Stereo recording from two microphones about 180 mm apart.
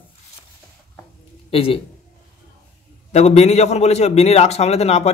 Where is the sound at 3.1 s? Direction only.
35° left (ahead or behind).